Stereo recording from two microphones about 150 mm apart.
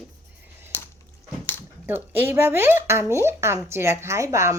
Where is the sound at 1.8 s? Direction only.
15° right (ahead or behind).